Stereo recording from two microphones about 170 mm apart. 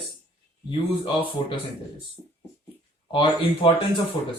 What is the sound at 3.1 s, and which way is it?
Speech, 30° left (ahead or behind).